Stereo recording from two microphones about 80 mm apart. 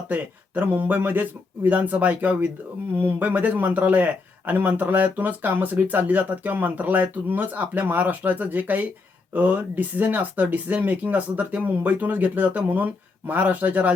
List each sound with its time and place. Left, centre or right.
0.1 s speech: right